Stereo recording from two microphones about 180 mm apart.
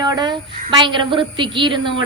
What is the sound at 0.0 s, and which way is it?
A woman's voice, 25° right (ahead or behind).